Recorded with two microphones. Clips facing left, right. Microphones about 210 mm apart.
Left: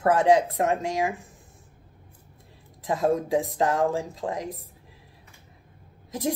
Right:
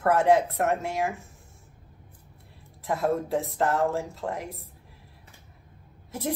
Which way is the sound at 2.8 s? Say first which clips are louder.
Left 2 dB; 15° left (ahead or behind).